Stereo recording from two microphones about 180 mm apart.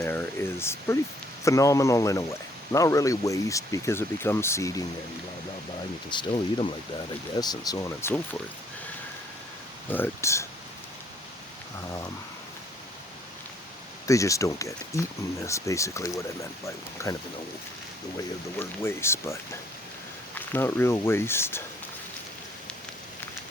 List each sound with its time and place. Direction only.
0.0 s speech: 15° left (ahead or behind)
6.1 s speech: 25° left (ahead or behind)
9.9 s speech: 15° left (ahead or behind)
14.1 s speech: 15° left (ahead or behind)
18.6 s speech: 15° left (ahead or behind)